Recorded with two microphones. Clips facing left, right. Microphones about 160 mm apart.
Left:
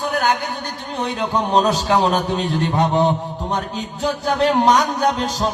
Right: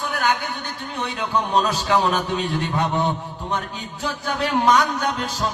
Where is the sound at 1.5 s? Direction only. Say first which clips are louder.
Left 4 dB; 40° left (ahead or behind).